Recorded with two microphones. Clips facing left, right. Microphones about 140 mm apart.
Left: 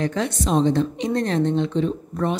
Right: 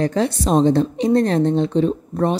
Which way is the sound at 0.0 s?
35° right (ahead or behind).